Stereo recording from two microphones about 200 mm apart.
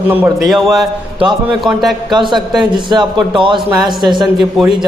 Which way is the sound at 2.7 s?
20° right (ahead or behind).